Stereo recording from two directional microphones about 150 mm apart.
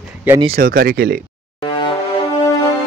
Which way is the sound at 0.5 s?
75° right (ahead or behind).